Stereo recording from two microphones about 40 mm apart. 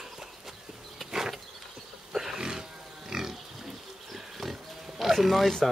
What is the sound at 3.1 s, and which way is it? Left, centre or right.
Pig, centre.